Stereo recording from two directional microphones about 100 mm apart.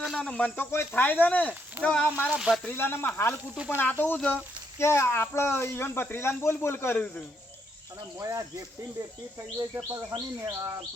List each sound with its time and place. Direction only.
0.0 s snake: 5° right (ahead or behind)
0.3 s speech: 10° left (ahead or behind)
2.1 s speech: 10° right (ahead or behind)
2.6 s speech: 20° left (ahead or behind)
3.5 s speech: 10° right (ahead or behind)
3.8 s speech: 20° left (ahead or behind)
8.2 s speech: 30° right (ahead or behind)
9.7 s speech: 25° right (ahead or behind)